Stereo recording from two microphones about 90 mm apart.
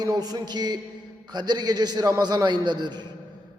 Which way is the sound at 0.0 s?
45° right (ahead or behind).